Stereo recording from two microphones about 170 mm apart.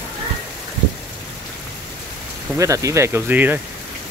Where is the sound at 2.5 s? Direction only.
20° right (ahead or behind).